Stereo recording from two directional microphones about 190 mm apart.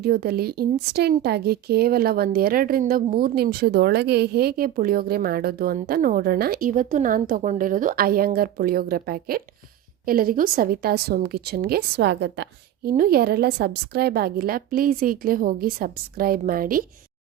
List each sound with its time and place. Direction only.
0.0 s speech: 55° right (ahead or behind)